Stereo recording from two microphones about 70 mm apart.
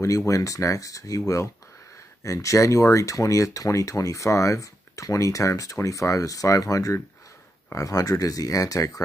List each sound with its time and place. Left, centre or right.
0.0 s speech: left